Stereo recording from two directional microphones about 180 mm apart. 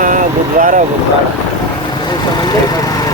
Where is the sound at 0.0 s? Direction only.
45° right (ahead or behind).